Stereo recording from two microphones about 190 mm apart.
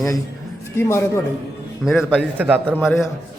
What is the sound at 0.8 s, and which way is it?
Speech, 15° left (ahead or behind).